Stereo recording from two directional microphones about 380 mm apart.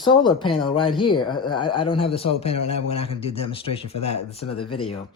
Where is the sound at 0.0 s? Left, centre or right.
Centre.